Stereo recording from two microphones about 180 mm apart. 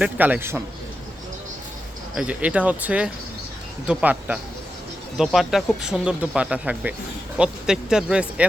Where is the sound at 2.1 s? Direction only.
5° right (ahead or behind).